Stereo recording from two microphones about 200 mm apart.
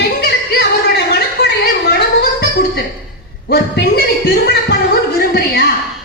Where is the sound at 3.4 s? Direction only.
55° left (ahead or behind).